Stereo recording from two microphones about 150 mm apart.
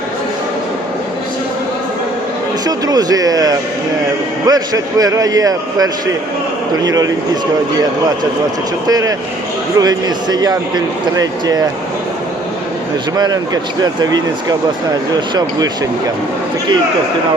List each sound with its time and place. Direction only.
2.6 s speech: 25° right (ahead or behind)
6.8 s speech: 25° right (ahead or behind)
8.9 s speech: 25° right (ahead or behind)
13.1 s speech: 25° right (ahead or behind)